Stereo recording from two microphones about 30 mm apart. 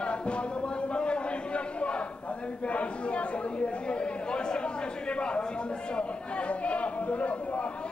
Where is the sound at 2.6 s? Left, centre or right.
Left.